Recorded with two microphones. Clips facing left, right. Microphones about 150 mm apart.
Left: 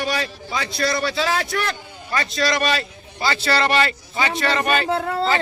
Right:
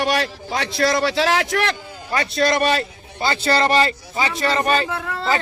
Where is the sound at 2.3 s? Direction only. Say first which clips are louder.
Right 4 dB; 55° right (ahead or behind); by 4.8 s 30° right (ahead or behind).